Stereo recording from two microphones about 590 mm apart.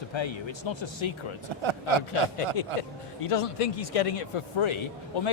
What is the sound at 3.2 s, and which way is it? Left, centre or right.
A man's voice, left.